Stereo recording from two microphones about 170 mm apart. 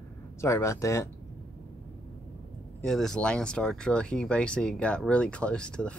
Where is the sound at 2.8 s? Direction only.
Centre (ahead or behind).